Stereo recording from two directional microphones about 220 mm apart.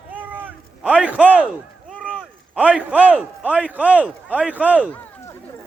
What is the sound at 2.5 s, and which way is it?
A man's voice, 5° right (ahead or behind).